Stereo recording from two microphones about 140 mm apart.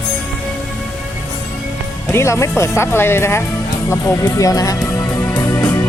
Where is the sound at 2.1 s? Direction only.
20° left (ahead or behind).